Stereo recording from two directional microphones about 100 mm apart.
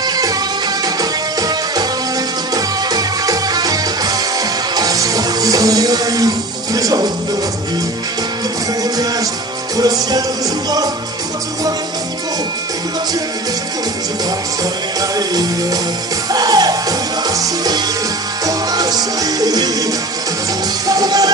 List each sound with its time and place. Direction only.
0.0 s music: 40° right (ahead or behind)
2.5 s music: 40° right (ahead or behind)
9.8 s music: 40° right (ahead or behind)
15.0 s music: 40° right (ahead or behind)
20.8 s music: 40° right (ahead or behind)